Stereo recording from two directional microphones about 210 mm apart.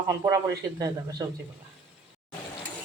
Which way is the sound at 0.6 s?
15° right (ahead or behind).